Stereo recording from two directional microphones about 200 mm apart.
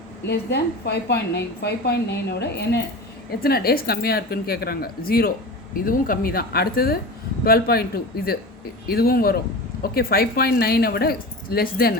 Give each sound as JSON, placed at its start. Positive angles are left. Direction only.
{"t": 0.3, "sound": "a woman's voice", "side_deg": 55}